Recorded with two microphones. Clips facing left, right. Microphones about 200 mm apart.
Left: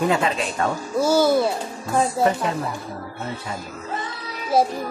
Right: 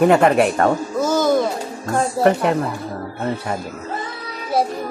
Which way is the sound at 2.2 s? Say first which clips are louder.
Right 5 dB; 60° right (ahead or behind).